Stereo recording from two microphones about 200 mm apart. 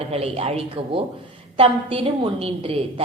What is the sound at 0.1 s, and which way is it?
A woman's voice, 30° right (ahead or behind).